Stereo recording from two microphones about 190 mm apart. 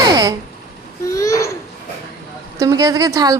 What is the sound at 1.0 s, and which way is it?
Babbling, 15° left (ahead or behind).